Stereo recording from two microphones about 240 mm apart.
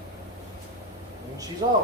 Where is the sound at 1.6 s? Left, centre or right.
Right.